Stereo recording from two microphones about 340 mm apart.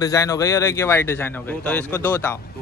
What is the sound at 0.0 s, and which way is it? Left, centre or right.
Speech, centre.